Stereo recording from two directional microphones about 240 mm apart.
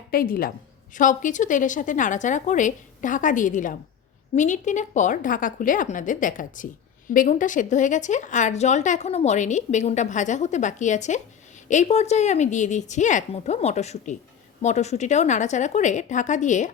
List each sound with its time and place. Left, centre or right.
0.1 s a woman's voice: left